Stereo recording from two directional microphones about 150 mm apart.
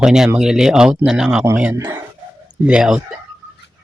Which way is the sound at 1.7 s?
20° right (ahead or behind).